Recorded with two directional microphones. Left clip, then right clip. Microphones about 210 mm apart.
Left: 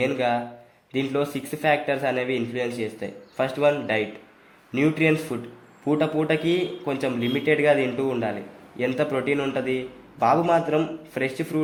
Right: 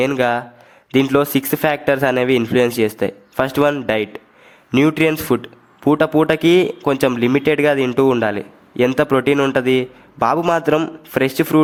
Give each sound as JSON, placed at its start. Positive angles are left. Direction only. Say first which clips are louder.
{"t": 0.0, "sound": "a man's voice", "louder": "right 6 dB", "side_deg": -35}